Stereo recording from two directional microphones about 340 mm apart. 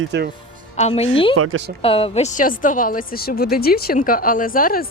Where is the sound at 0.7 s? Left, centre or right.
Centre.